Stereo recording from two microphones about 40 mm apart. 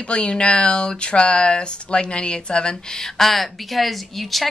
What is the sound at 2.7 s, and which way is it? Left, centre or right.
Speech, centre.